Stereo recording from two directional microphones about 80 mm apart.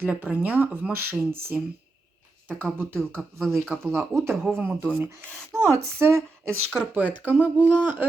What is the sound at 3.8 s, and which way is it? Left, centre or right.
Speech, right.